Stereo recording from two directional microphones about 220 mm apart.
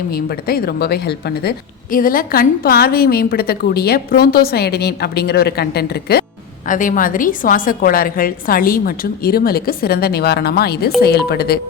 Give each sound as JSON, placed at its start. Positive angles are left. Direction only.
{"t": 0.1, "sound": "a woman's voice", "side_deg": 45}